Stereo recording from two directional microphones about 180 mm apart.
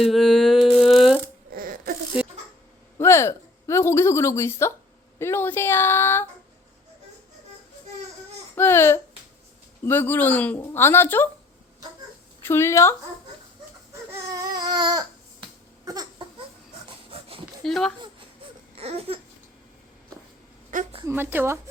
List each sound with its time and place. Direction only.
0.0 s humming: centre (ahead or behind)
1.5 s a sound: 50° right (ahead or behind)
3.0 s a woman's voice: 15° left (ahead or behind)
8.5 s speech: 15° left (ahead or behind)
12.4 s speech: 15° left (ahead or behind)
13.9 s baby cry: 20° right (ahead or behind)
16.9 s a sound: 30° right (ahead or behind)
17.6 s speech: centre (ahead or behind)
18.8 s babbling: 35° right (ahead or behind)
20.7 s a woman's voice: 45° right (ahead or behind)
21.1 s speech: 10° right (ahead or behind)